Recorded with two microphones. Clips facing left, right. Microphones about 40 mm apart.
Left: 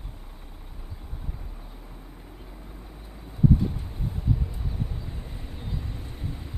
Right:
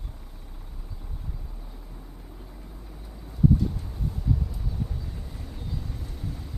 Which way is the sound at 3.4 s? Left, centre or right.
Left.